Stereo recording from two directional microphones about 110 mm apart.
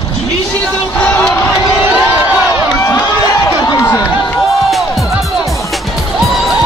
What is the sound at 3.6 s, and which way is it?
Crowd, 25° left (ahead or behind).